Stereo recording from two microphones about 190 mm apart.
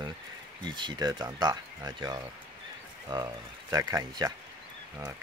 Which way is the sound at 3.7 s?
15° right (ahead or behind).